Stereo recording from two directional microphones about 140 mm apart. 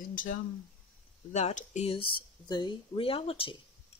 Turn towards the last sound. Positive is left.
turn(degrees=40)  # may be behind; listen again after turning